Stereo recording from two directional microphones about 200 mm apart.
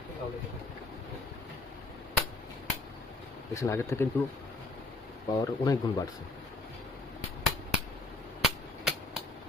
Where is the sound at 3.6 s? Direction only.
15° left (ahead or behind).